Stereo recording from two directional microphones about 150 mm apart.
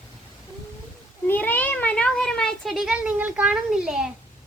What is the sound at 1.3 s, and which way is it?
Cat, 10° left (ahead or behind).